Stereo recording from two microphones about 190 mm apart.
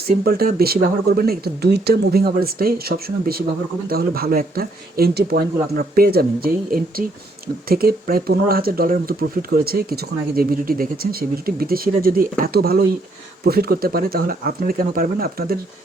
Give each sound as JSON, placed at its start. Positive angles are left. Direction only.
{"t": 0.3, "sound": "speech", "side_deg": -55}